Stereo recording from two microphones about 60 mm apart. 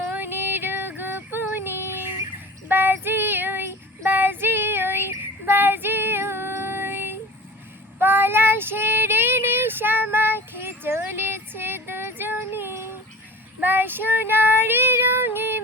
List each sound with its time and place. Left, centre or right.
0.1 s female singing: right
2.6 s child singing: right